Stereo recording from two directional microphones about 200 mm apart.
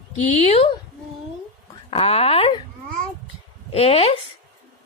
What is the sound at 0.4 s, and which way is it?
Speech, 30° left (ahead or behind).